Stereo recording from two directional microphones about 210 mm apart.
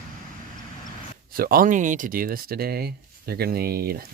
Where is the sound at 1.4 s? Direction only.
45° right (ahead or behind).